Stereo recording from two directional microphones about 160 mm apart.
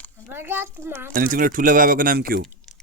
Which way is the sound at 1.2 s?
60° right (ahead or behind).